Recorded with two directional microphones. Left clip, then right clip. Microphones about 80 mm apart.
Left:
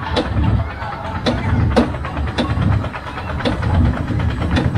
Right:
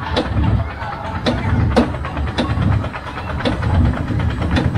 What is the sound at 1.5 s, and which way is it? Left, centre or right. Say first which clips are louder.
Vehicle: even; centre.